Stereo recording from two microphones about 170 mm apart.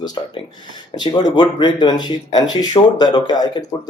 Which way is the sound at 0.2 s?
25° left (ahead or behind).